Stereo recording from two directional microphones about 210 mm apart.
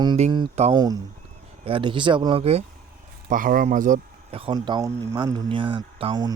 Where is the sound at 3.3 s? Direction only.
40° right (ahead or behind).